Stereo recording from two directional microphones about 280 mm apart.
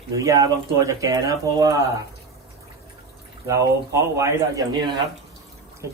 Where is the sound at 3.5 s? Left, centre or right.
Centre.